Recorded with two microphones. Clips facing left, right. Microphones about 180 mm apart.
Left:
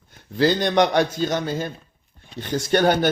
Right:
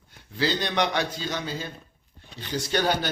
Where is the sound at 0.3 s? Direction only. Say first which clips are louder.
Left 7 dB; 50° left (ahead or behind).